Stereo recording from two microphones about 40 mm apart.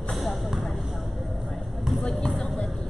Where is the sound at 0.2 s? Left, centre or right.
Centre.